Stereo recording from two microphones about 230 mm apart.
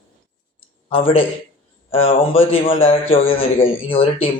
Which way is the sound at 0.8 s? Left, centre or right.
Left.